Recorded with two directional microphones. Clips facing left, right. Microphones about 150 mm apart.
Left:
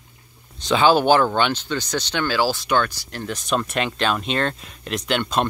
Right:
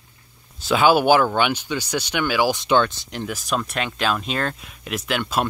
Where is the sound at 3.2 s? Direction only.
5° right (ahead or behind).